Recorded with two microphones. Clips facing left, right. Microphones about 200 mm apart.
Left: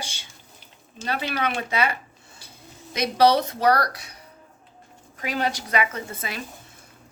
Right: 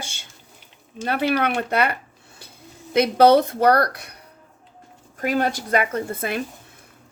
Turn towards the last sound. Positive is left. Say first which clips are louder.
# right 8 dB
turn(degrees=-55)  # may be behind; listen again after turning